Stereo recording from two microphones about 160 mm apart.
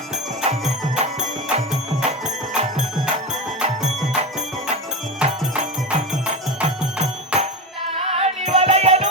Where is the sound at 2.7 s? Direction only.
5° right (ahead or behind).